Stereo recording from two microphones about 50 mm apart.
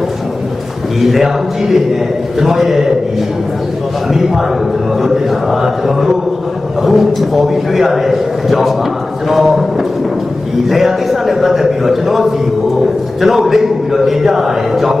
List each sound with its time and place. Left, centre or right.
1.0 s a man's voice: centre
4.1 s a man's voice: centre
5.0 s chant: centre
6.8 s a man's voice: centre
10.7 s a man's voice: centre